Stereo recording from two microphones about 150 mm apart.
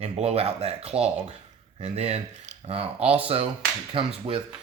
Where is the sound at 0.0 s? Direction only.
45° right (ahead or behind).